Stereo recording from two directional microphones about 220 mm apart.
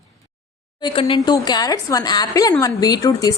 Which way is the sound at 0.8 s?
25° left (ahead or behind).